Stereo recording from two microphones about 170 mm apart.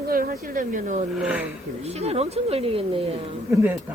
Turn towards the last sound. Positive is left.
turn(degrees=-10)  # may be behind; listen again after turning